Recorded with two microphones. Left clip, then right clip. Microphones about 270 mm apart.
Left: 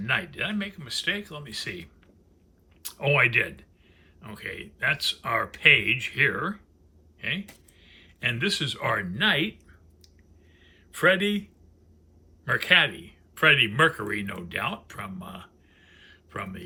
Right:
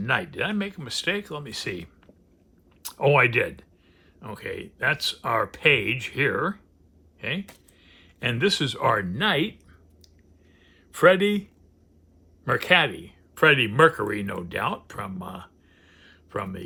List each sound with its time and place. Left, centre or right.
0.0 s speech: centre
12.5 s speech: centre